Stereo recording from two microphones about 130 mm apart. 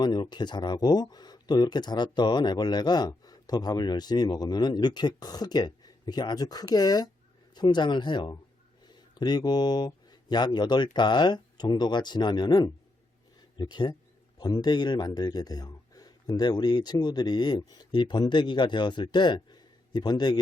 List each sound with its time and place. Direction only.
0.0 s speech: 35° left (ahead or behind)